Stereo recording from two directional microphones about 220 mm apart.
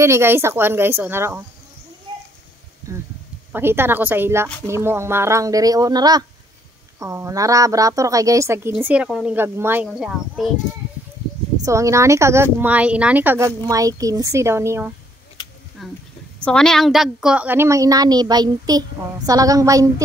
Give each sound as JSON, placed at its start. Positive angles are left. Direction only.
{"t": 0.0, "sound": "a woman's voice", "side_deg": -10}
{"t": 2.1, "sound": "a sound", "side_deg": -20}
{"t": 3.5, "sound": "a woman's voice", "side_deg": -10}
{"t": 11.6, "sound": "a woman's voice", "side_deg": -15}
{"t": 15.4, "sound": "a sound", "side_deg": 20}
{"t": 15.8, "sound": "a woman's voice", "side_deg": 0}